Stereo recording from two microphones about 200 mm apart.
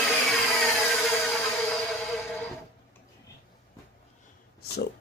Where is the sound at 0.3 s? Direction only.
5° left (ahead or behind).